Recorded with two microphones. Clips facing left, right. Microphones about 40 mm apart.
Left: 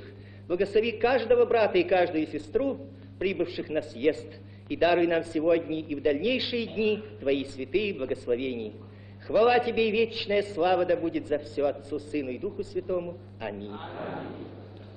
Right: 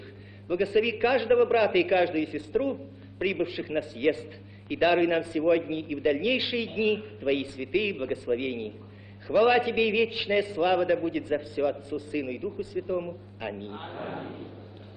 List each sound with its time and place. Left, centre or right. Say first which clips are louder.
0.5 s a man's voice: even; right